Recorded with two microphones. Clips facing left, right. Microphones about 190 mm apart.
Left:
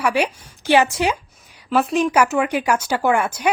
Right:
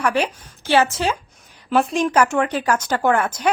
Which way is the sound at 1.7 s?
Centre (ahead or behind).